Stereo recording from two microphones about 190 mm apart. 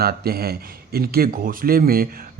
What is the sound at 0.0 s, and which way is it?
Speech, 55° right (ahead or behind).